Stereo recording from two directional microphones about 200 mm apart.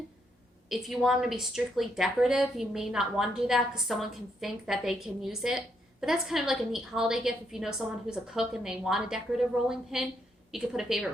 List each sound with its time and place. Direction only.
0.7 s a woman's voice: centre (ahead or behind)